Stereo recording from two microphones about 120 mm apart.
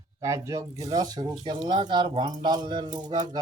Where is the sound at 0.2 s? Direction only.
25° right (ahead or behind).